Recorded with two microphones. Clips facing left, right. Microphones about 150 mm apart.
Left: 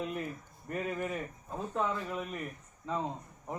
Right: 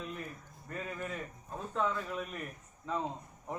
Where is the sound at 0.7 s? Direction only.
15° left (ahead or behind).